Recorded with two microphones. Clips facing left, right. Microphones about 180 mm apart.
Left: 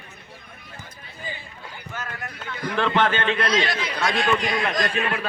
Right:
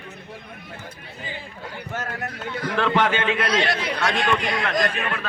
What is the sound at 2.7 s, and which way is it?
Speech, 5° right (ahead or behind).